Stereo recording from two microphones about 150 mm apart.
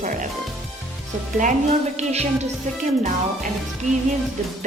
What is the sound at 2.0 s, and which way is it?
Speech, 50° right (ahead or behind).